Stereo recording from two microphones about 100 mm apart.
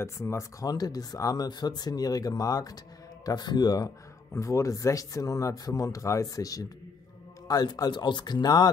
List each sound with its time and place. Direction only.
0.0 s speech: 30° left (ahead or behind)
4.3 s speech: 30° left (ahead or behind)